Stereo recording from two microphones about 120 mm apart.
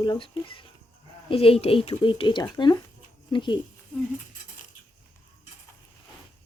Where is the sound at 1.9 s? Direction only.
45° left (ahead or behind).